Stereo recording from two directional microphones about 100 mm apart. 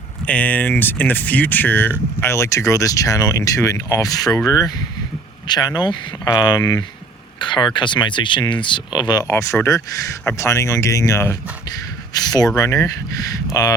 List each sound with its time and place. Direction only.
0.3 s speech: 15° left (ahead or behind)
2.3 s speech: 30° left (ahead or behind)
7.3 s speech: 50° left (ahead or behind)
9.2 s speech: 30° left (ahead or behind)
12.1 s speech: 40° left (ahead or behind)